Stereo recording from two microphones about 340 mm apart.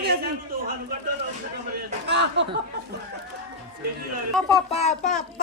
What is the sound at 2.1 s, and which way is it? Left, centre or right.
Speech, right.